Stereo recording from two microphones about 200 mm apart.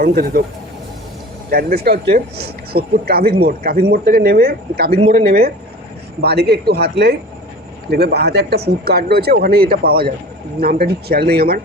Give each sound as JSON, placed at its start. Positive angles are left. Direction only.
{"t": 0.0, "sound": "speech", "side_deg": -50}
{"t": 1.5, "sound": "speech", "side_deg": -50}
{"t": 4.9, "sound": "speech", "side_deg": -30}
{"t": 6.2, "sound": "speech", "side_deg": -55}